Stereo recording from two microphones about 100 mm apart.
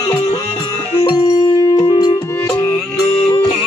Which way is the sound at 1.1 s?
40° left (ahead or behind).